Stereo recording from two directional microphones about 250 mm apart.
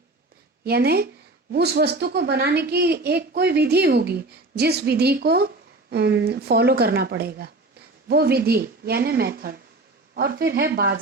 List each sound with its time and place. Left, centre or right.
0.6 s a woman's voice: right